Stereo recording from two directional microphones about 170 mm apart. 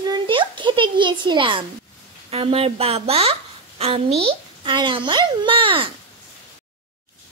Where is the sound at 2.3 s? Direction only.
35° right (ahead or behind).